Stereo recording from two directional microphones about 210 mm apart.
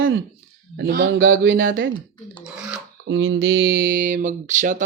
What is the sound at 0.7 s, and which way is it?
Speech, 50° right (ahead or behind).